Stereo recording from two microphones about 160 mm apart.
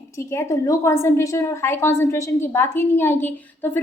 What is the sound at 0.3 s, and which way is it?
A woman's voice, 20° left (ahead or behind).